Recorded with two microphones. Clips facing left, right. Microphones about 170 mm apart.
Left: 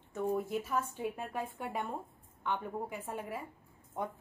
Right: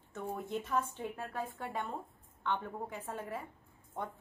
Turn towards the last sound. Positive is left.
turn(degrees=10)  # may be behind; listen again after turning